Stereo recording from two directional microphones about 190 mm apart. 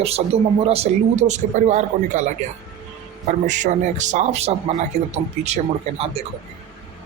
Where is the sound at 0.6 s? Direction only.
30° right (ahead or behind).